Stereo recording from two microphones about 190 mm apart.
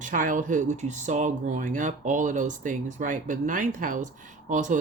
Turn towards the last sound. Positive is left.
turn(degrees=-40)  # may be behind; listen again after turning